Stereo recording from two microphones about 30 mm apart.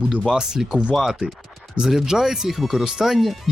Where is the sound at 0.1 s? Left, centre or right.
Right.